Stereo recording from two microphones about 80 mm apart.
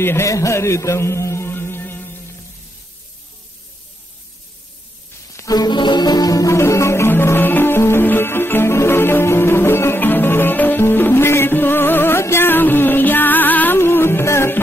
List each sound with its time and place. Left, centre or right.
0.0 s a man's voice: left
0.3 s music: left
5.5 s music: left